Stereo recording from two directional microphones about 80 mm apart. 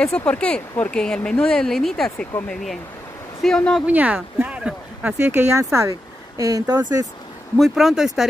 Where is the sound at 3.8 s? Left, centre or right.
Centre.